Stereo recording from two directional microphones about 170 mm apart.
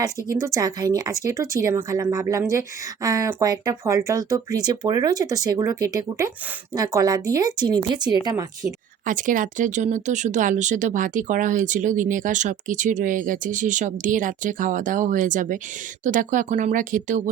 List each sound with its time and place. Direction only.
0.0 s speech: 20° right (ahead or behind)
9.0 s speech: 50° right (ahead or behind)